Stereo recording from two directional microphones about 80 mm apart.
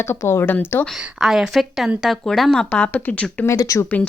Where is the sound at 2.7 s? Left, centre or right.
Centre.